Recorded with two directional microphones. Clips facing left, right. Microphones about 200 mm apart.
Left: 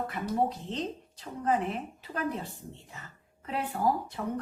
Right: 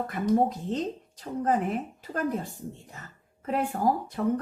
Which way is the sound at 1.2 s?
45° right (ahead or behind).